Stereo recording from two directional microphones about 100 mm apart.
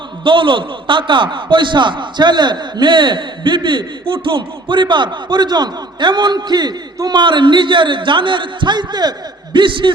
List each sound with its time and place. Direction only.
0.3 s a man's voice: 55° right (ahead or behind)